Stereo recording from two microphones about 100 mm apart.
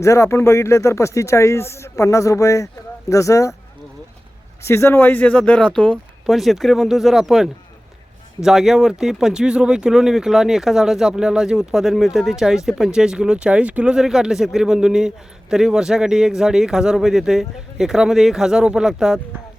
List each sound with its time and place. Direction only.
0.0 s speech: 30° left (ahead or behind)
4.6 s speech: 25° left (ahead or behind); by 6.0 s 10° left (ahead or behind)
6.2 s speech: centre (ahead or behind)